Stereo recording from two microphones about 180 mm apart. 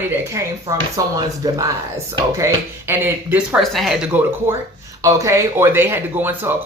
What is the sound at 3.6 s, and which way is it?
Speech, centre (ahead or behind).